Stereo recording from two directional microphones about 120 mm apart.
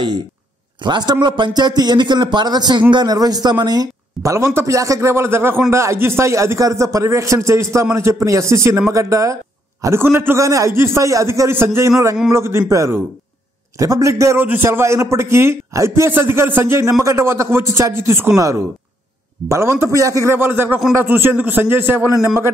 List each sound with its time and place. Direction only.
0.8 s a man's voice: 35° right (ahead or behind)